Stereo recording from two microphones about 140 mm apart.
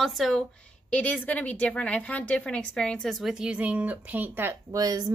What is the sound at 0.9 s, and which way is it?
A woman's voice, 10° left (ahead or behind).